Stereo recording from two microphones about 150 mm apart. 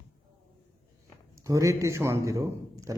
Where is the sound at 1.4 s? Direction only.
20° right (ahead or behind).